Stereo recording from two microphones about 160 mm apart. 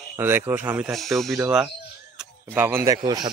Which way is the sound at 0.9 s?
Centre (ahead or behind).